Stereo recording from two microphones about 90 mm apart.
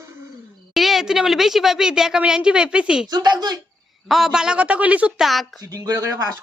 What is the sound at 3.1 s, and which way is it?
Speech, 50° right (ahead or behind).